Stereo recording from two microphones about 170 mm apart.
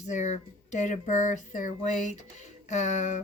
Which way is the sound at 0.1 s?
45° left (ahead or behind).